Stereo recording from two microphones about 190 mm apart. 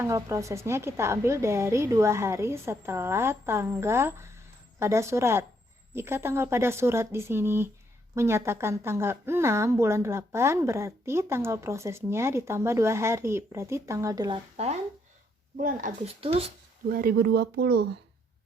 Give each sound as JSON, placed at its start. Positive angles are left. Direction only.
{"t": 0.0, "sound": "a woman's voice", "side_deg": -15}
{"t": 15.5, "sound": "speech", "side_deg": -45}
{"t": 16.0, "sound": "speech", "side_deg": -30}
{"t": 16.9, "sound": "speech", "side_deg": -50}